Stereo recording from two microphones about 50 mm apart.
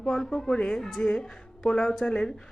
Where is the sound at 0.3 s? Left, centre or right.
Centre.